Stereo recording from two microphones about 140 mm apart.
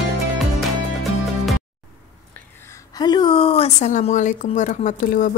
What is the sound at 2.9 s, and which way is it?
A woman's voice, 30° left (ahead or behind).